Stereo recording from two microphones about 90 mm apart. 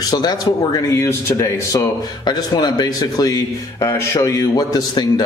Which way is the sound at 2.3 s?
50° left (ahead or behind).